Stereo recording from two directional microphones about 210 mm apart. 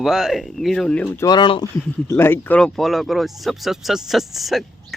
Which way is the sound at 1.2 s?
20° left (ahead or behind).